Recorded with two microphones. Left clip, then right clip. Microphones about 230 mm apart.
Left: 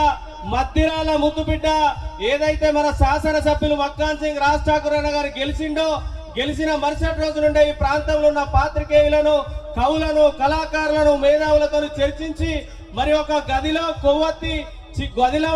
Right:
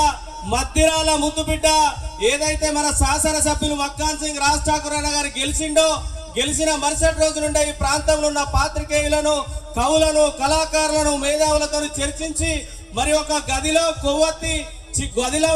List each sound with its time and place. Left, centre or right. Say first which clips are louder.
0.5 s a man's voice: right 2 dB; right